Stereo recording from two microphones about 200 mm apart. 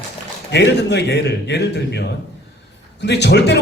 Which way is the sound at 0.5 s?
55° left (ahead or behind).